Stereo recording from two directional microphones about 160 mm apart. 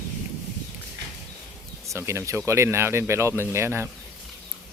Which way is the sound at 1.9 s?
15° right (ahead or behind).